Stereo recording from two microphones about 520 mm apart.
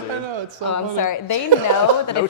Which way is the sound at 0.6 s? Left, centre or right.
Left.